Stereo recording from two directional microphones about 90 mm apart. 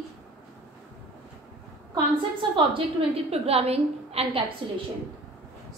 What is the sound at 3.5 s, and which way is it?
Speech, 90° right.